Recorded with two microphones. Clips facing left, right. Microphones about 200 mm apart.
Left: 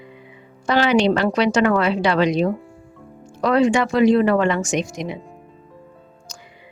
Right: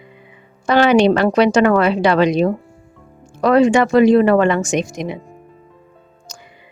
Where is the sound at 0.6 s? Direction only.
55° right (ahead or behind).